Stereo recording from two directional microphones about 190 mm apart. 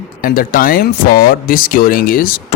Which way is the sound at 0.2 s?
50° left (ahead or behind).